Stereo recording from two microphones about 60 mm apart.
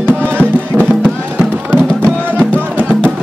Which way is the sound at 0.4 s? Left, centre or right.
Left.